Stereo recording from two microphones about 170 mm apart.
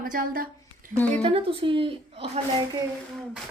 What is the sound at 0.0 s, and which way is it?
Speech, 55° right (ahead or behind).